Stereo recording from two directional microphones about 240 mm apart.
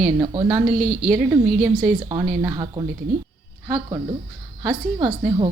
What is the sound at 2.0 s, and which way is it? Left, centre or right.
A woman's voice, centre.